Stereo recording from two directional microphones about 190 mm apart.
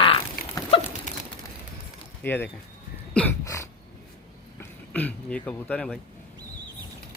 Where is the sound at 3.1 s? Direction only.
10° left (ahead or behind).